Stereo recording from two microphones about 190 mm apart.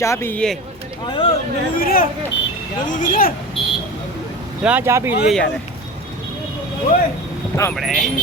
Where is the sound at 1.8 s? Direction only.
50° left (ahead or behind).